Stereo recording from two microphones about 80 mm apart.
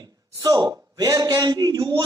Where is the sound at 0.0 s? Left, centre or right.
Right.